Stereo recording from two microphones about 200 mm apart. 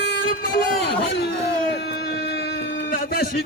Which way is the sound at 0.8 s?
55° left (ahead or behind).